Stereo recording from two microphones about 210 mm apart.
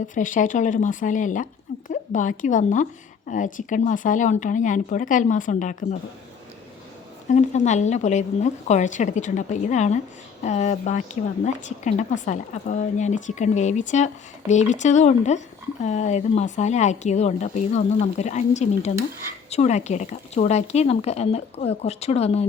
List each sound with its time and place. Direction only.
0.1 s a woman's voice: 40° left (ahead or behind)
7.3 s a woman's voice: 35° left (ahead or behind)